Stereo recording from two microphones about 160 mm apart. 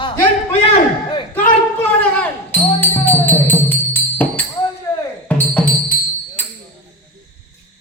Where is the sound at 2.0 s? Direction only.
10° left (ahead or behind).